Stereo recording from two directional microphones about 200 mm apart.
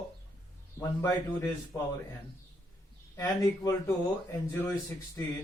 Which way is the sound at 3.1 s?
15° left (ahead or behind).